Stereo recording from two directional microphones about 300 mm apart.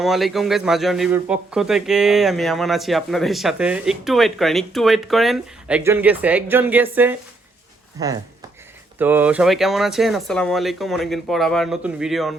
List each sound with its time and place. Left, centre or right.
0.0 s speech: centre